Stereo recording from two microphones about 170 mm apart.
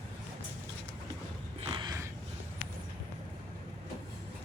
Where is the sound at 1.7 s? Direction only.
25° right (ahead or behind).